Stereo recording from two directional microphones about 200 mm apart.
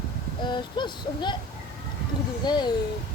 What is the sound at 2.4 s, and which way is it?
Speech, 20° left (ahead or behind).